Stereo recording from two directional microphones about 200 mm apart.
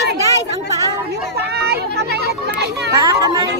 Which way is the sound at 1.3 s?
55° right (ahead or behind).